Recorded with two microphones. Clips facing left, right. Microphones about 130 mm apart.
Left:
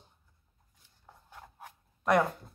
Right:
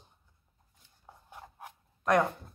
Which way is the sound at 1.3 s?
20° right (ahead or behind).